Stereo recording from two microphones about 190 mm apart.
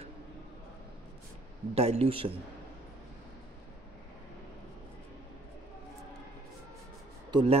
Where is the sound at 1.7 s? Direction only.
35° right (ahead or behind).